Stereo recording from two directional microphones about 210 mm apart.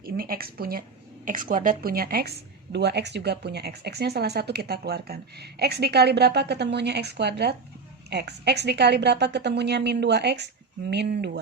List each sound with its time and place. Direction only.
0.0 s a woman's voice: 45° right (ahead or behind)